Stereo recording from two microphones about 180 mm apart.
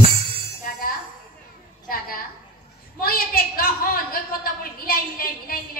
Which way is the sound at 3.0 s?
55° left (ahead or behind).